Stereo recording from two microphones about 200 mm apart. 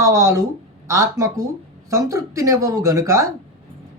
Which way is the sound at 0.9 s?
15° right (ahead or behind).